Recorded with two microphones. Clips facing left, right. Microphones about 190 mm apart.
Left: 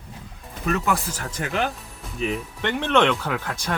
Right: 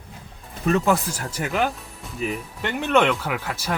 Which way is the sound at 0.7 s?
30° right (ahead or behind).